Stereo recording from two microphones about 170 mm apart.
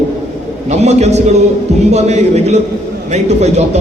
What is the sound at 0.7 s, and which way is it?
A man's voice, 40° right (ahead or behind).